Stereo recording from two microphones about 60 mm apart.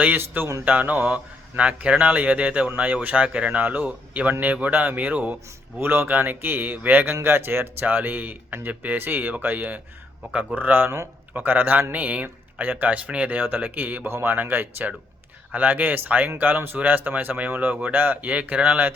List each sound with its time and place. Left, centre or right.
0.2 s speech: right
0.6 s speech: right
5.8 s speech: right
7.2 s speech: right
11.3 s speech: right